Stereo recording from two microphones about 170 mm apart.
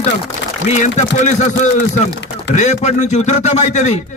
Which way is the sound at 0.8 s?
45° left (ahead or behind).